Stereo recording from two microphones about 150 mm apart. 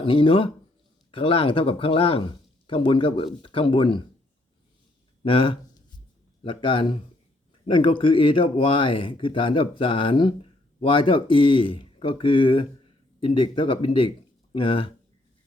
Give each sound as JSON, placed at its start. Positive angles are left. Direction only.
{"t": 0.0, "sound": "speech", "side_deg": 35}
{"t": 5.2, "sound": "speech", "side_deg": 35}